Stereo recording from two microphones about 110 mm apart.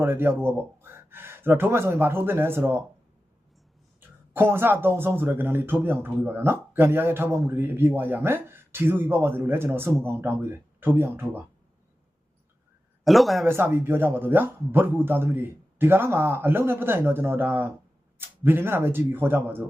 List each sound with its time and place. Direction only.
0.0 s speech: 20° right (ahead or behind)
4.4 s a man's voice: 20° right (ahead or behind)
13.1 s speech: centre (ahead or behind)
13.4 s a man's voice: 20° right (ahead or behind)